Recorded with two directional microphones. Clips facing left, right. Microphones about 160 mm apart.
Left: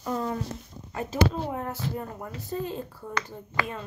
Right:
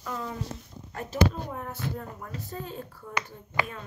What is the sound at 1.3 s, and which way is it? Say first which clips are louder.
Speech: left 5 dB; 85° left.